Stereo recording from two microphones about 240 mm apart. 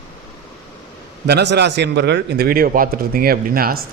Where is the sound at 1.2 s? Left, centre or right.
Right.